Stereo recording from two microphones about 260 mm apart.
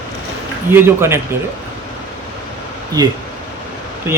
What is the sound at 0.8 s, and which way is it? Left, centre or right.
Speech, centre.